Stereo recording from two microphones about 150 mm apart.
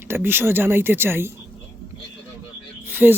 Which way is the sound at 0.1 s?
15° right (ahead or behind).